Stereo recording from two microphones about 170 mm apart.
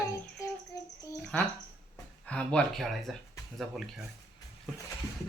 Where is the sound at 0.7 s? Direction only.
20° left (ahead or behind).